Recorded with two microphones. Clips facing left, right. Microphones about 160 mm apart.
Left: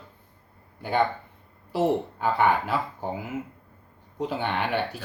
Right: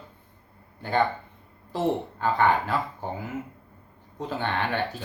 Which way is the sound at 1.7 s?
10° left (ahead or behind).